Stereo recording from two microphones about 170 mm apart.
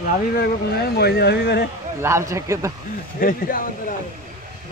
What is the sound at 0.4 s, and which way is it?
Speech, 70° left (ahead or behind).